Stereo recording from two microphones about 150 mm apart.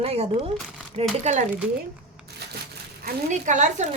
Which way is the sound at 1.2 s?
55° right (ahead or behind).